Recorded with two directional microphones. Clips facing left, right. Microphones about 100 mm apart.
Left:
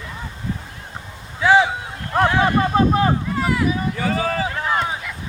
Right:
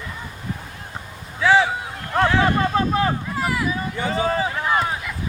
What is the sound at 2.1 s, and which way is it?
Boat, 20° left (ahead or behind).